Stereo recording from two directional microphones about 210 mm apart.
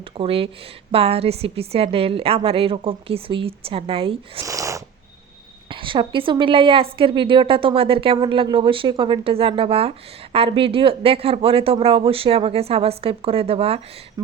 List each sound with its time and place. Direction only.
0.2 s a woman's voice: 25° right (ahead or behind)
4.4 s a woman's voice: 15° right (ahead or behind)